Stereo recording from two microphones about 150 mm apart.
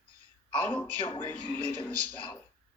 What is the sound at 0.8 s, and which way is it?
Speech, 10° left (ahead or behind).